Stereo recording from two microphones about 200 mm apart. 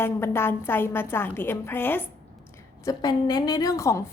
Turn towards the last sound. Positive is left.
turn(degrees=15)  # may be behind; listen again after turning